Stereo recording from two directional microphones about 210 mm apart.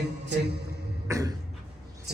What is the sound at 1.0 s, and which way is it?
Cough, 15° right (ahead or behind).